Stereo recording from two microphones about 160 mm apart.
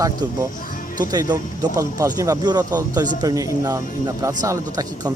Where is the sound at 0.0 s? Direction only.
20° right (ahead or behind).